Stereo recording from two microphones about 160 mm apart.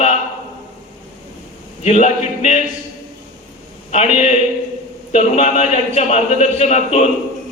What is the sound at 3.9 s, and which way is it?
A man's voice, 40° left (ahead or behind).